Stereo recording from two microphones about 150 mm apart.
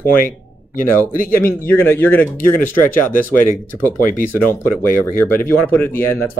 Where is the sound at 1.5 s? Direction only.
15° left (ahead or behind).